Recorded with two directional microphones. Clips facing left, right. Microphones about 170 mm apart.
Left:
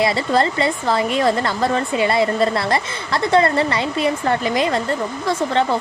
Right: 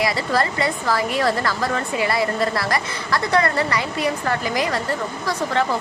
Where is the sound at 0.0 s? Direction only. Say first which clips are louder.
Left 4 dB; 25° left (ahead or behind).